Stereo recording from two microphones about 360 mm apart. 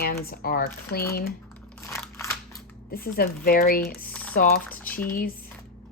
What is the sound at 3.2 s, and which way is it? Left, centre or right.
Speech, left.